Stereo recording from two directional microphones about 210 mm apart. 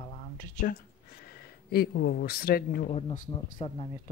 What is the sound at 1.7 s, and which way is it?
Speech, 50° left (ahead or behind).